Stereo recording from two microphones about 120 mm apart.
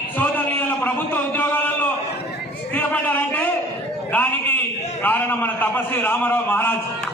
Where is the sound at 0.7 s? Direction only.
15° left (ahead or behind).